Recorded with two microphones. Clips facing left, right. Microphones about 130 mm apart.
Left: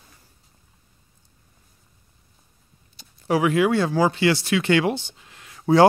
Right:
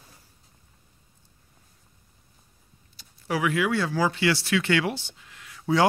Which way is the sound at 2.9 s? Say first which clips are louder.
Left 6 dB; 25° left (ahead or behind).